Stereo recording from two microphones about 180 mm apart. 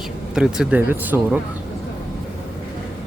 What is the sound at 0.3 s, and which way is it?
Speech, 5° right (ahead or behind).